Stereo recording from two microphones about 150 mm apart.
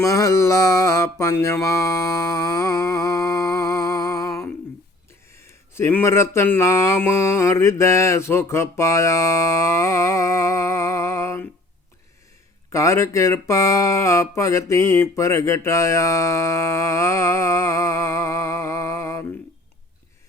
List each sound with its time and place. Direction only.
0.0 s music: 20° left (ahead or behind)
5.7 s speech: 15° left (ahead or behind)
12.7 s speech: 20° left (ahead or behind)